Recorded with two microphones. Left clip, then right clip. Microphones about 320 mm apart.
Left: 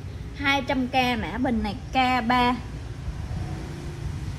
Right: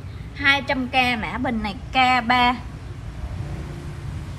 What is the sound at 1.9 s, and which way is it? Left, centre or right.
Speech, right.